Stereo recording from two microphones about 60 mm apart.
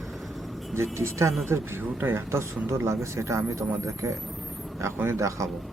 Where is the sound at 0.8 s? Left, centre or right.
Right.